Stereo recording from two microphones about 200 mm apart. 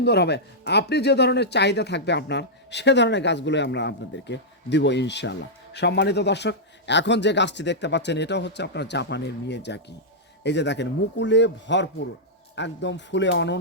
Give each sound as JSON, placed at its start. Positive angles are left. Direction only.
{"t": 0.0, "sound": "speech", "side_deg": 55}